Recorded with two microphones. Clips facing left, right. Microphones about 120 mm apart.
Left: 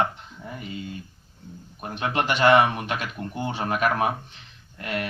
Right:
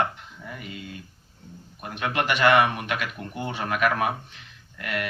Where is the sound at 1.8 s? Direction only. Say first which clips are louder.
Left 1 dB; 30° left (ahead or behind).